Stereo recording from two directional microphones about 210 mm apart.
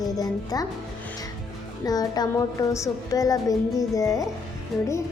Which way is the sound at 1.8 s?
20° left (ahead or behind).